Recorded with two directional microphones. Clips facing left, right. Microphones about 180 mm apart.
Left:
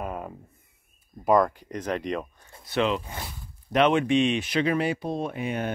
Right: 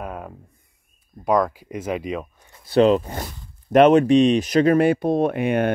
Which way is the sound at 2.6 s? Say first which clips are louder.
Right 10 dB; 35° right (ahead or behind).